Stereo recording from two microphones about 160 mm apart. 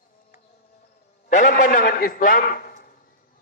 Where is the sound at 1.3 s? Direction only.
55° left (ahead or behind).